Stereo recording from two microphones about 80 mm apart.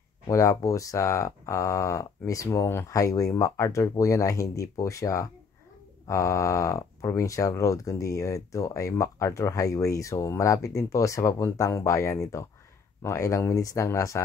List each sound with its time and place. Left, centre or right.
0.3 s speech: left